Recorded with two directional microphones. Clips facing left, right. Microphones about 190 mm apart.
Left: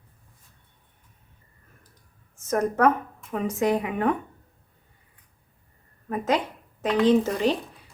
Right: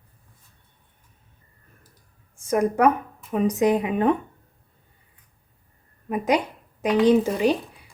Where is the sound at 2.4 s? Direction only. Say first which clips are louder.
Right 2 dB; 10° right (ahead or behind).